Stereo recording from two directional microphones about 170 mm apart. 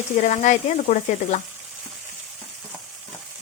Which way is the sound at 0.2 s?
45° left (ahead or behind).